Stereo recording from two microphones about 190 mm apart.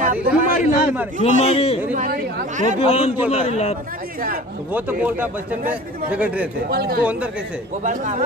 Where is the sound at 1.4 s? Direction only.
35° left (ahead or behind).